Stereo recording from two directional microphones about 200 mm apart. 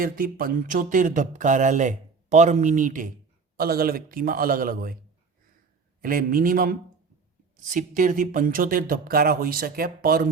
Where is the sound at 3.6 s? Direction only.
50° right (ahead or behind).